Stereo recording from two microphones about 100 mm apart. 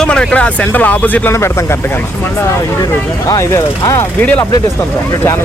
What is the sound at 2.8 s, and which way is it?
Speech, 40° left (ahead or behind).